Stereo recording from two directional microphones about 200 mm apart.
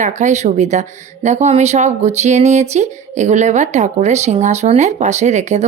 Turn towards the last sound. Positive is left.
turn(degrees=-35)  # may be behind; listen again after turning